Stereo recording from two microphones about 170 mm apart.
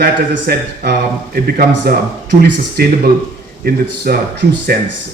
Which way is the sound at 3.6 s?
65° right (ahead or behind).